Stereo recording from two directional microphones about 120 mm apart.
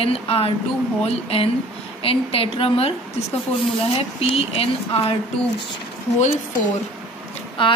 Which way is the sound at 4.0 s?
55° left (ahead or behind).